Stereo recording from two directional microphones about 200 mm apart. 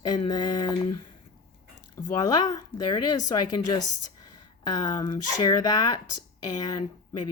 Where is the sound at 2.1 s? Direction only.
20° left (ahead or behind).